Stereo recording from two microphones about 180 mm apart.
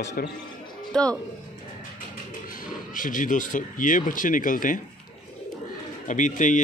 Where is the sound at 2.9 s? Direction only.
45° left (ahead or behind).